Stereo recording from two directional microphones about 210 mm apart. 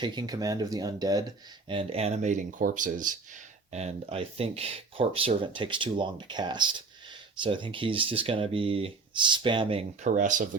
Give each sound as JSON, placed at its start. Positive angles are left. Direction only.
{"t": 0.0, "sound": "speech", "side_deg": -20}